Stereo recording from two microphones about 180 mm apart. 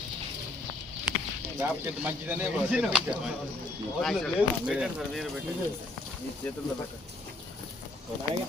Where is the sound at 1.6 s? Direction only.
15° right (ahead or behind).